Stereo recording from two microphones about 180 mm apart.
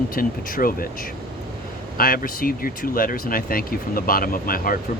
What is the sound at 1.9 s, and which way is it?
Speech, 55° left (ahead or behind).